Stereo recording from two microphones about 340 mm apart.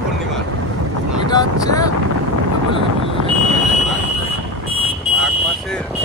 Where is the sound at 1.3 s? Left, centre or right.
Centre.